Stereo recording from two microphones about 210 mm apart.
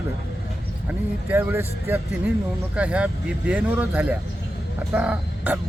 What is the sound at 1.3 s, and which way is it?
Speech, 10° right (ahead or behind).